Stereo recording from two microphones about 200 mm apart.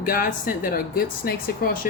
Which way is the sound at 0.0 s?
45° left (ahead or behind).